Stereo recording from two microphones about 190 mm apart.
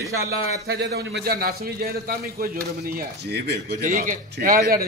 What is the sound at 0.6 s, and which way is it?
A man's voice, 60° right (ahead or behind).